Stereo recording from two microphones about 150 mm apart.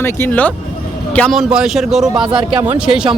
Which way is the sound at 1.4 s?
5° right (ahead or behind).